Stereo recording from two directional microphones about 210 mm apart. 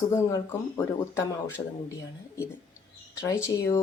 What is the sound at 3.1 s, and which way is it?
Speech, 15° left (ahead or behind).